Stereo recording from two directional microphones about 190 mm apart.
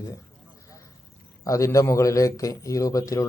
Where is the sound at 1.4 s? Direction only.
15° left (ahead or behind).